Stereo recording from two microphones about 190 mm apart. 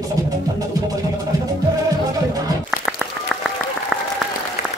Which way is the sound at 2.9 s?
5° right (ahead or behind).